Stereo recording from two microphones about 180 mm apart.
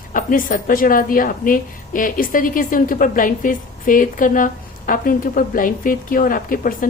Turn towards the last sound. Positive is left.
turn(degrees=50)  # may be behind; listen again after turning